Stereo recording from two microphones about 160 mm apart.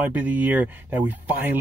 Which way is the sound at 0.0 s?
10° right (ahead or behind).